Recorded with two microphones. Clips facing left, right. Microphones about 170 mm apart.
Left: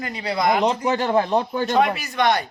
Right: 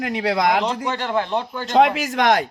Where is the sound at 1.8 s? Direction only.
90° right.